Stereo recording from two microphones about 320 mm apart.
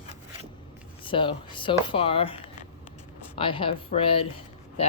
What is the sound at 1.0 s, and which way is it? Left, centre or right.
A man's voice, centre.